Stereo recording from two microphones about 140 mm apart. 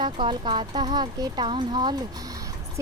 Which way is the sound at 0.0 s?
35° right (ahead or behind).